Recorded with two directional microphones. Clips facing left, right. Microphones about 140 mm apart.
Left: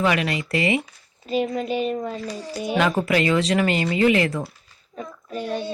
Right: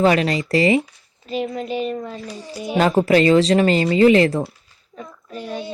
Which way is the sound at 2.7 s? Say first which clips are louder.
Right 5 dB; 35° right (ahead or behind).